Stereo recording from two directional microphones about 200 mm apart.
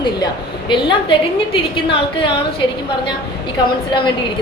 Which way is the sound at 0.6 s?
25° left (ahead or behind).